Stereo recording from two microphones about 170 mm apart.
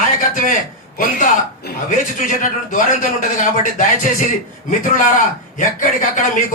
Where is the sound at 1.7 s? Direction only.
70° left (ahead or behind).